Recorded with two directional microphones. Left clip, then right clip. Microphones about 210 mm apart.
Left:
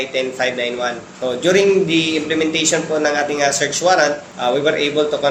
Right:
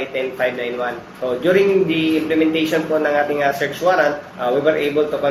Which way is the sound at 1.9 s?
50° left (ahead or behind).